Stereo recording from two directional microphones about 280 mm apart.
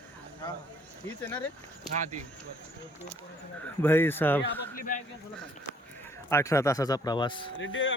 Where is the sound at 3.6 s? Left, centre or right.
Centre.